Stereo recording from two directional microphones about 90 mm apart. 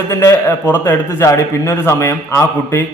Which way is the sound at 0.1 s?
35° left (ahead or behind).